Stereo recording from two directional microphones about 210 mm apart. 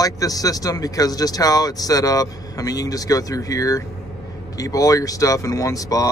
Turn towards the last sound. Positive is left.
turn(degrees=15)  # may be behind; listen again after turning